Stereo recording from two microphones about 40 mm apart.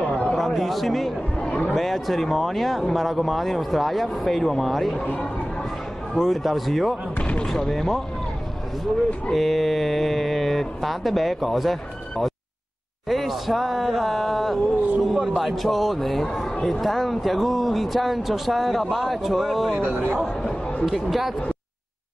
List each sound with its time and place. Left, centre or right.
0.1 s a sound: left
0.4 s a man's voice: centre
1.4 s a sound: left
1.8 s speech: centre
6.1 s speech: centre
7.2 s basketball bounce: left
7.4 s speech: centre
9.3 s speech: centre
19.8 s speech: right
20.8 s speech: centre